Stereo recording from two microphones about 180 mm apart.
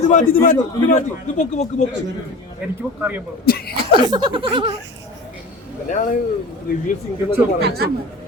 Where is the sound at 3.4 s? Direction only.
55° left (ahead or behind).